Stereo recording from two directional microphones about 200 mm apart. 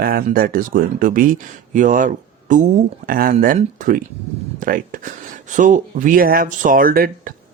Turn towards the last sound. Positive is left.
turn(degrees=-45)  # may be behind; listen again after turning